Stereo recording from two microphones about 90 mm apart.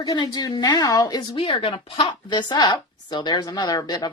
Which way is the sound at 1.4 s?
80° left.